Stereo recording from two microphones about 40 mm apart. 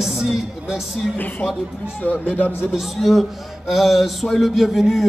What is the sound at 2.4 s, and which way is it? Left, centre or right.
Speech, left.